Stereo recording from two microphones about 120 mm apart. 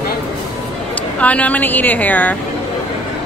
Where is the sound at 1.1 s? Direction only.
10° left (ahead or behind).